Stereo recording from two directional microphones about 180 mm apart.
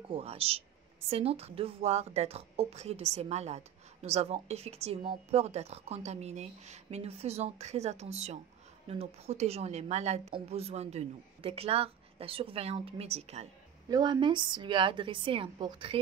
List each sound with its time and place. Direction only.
0.1 s a woman's voice: 35° right (ahead or behind)
13.8 s a woman's voice: 25° right (ahead or behind)